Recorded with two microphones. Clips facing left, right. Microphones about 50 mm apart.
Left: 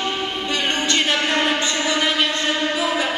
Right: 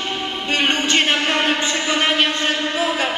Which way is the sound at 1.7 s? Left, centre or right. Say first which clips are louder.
Right 1 dB; right.